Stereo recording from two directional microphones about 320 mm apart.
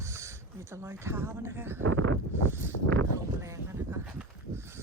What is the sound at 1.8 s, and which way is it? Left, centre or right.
Speech, right.